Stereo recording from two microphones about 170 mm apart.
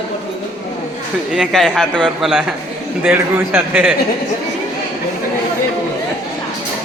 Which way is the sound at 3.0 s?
10° right (ahead or behind).